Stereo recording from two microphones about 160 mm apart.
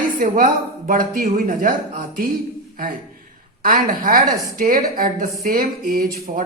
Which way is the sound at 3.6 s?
60° right (ahead or behind).